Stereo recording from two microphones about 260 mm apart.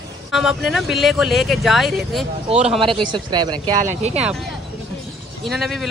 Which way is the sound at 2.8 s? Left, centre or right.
Centre.